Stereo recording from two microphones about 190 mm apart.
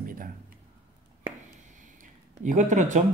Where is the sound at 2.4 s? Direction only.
40° right (ahead or behind).